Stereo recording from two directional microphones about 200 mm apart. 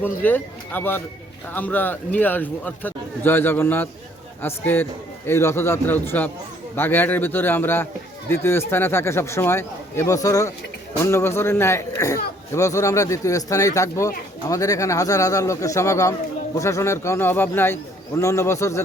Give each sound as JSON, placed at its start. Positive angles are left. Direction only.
{"t": 0.0, "sound": "a man's voice", "side_deg": 10}